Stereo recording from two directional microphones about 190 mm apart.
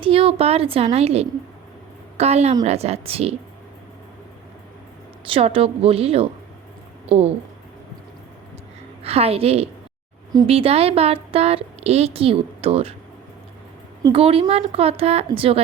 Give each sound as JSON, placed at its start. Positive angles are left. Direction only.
{"t": 0.0, "sound": "a woman's voice", "side_deg": -30}
{"t": 5.3, "sound": "a woman's voice", "side_deg": -30}
{"t": 9.0, "sound": "a woman's voice", "side_deg": -30}
{"t": 14.0, "sound": "a woman's voice", "side_deg": -30}